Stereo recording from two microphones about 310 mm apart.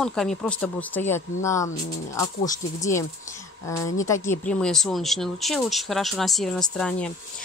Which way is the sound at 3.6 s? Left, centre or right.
Centre.